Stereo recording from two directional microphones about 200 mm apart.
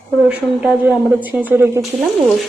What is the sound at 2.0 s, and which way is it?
Speech, centre (ahead or behind).